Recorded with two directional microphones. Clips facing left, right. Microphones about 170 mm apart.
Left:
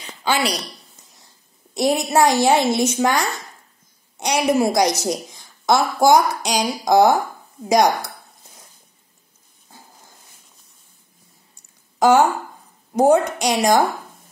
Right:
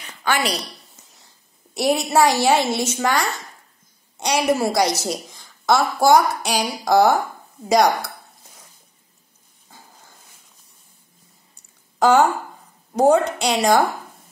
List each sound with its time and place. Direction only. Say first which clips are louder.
1.9 s a woman's voice: even; 15° left (ahead or behind)
9.7 s dog: left 1 dB; 15° left (ahead or behind)
12.0 s a woman's voice: left 1 dB; 10° left (ahead or behind)